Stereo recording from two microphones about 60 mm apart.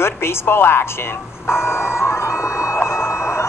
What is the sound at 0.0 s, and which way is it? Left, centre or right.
Speech, left.